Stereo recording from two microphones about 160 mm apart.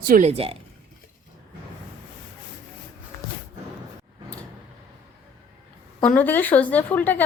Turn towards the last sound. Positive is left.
turn(degrees=10)  # may be behind; listen again after turning